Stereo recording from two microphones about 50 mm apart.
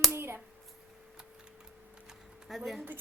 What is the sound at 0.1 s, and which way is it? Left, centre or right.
Hands, right.